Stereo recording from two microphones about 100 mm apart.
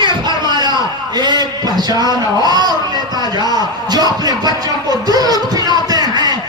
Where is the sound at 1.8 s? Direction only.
40° right (ahead or behind).